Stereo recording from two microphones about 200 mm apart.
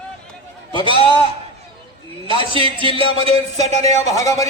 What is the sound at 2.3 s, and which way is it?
A man's voice, 25° right (ahead or behind).